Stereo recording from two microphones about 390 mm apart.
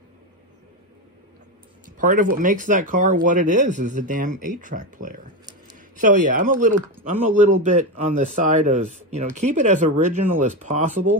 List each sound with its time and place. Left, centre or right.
2.0 s speech: right